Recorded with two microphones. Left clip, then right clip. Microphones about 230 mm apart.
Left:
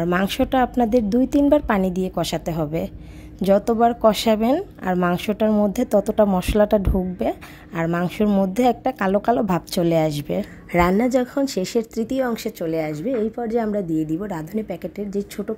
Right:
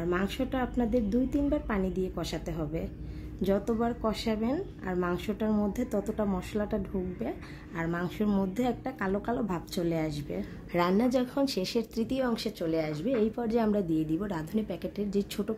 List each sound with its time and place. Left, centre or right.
0.0 s a woman's voice: left; by 15.5 s centre